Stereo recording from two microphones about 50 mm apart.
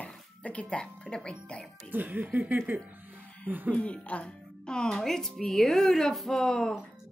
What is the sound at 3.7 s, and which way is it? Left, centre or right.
A woman's voice, left.